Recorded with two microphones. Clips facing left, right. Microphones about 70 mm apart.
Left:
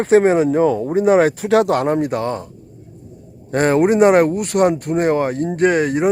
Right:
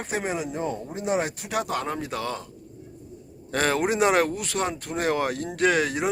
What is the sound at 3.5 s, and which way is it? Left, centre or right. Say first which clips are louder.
Speech: left 9 dB; left.